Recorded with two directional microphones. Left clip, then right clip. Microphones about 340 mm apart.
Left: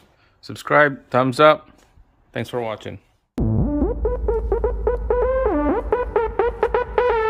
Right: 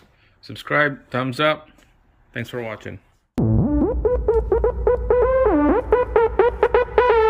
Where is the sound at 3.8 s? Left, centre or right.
Centre.